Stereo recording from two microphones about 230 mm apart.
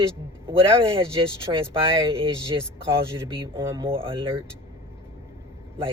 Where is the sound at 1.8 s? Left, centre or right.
Right.